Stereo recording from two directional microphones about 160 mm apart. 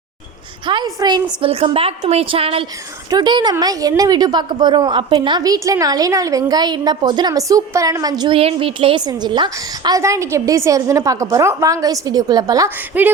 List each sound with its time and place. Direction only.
0.7 s a woman's voice: 30° right (ahead or behind)
12.9 s speech: 10° right (ahead or behind)